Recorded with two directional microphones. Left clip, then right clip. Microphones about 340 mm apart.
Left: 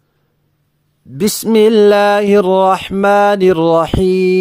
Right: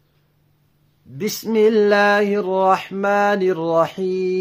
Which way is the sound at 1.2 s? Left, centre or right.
Left.